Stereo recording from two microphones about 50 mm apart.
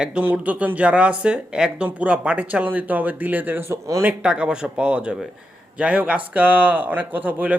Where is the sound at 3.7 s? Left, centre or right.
Right.